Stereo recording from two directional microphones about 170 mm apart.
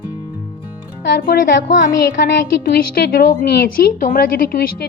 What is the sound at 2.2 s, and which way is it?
A woman's voice, 70° left (ahead or behind).